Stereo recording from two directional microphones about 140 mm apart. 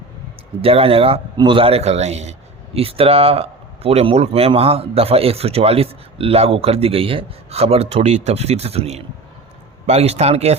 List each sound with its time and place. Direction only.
0.6 s speech: 45° right (ahead or behind)